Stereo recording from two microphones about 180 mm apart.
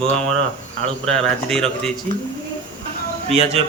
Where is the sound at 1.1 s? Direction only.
5° left (ahead or behind).